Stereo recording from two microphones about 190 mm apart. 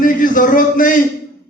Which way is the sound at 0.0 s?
45° left (ahead or behind).